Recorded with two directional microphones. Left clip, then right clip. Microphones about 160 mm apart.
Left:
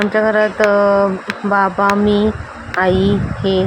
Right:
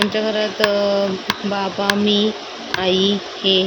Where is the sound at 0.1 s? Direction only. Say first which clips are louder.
Left 6 dB; 10° left (ahead or behind).